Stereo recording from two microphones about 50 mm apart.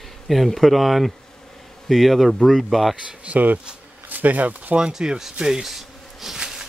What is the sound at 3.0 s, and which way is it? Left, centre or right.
Speech, right.